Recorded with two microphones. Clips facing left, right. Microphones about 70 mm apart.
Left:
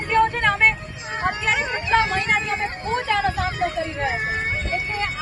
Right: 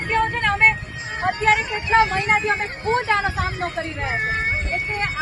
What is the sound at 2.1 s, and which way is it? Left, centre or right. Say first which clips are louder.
Vehicle: right 2 dB; right.